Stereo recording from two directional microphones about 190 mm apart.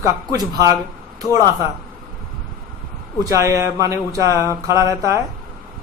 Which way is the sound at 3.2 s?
15° right (ahead or behind).